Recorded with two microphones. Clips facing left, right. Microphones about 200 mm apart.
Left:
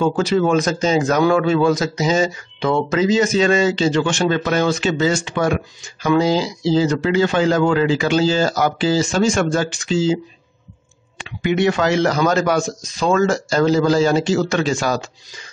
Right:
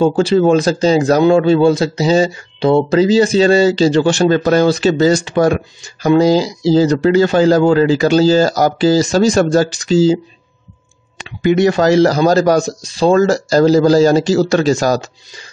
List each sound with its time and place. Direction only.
0.0 s a man's voice: 30° right (ahead or behind)
11.4 s a man's voice: 40° right (ahead or behind)